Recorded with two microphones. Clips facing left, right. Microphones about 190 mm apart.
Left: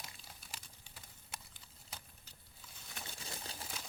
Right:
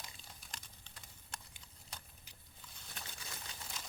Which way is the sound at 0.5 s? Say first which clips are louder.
Even; 5° left (ahead or behind).